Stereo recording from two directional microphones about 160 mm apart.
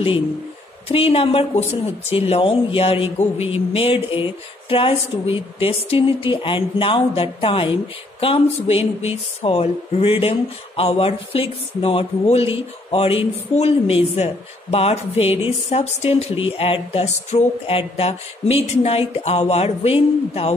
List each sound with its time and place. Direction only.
0.8 s speech: 35° left (ahead or behind)